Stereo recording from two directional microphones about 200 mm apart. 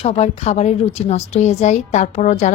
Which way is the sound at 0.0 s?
30° left (ahead or behind).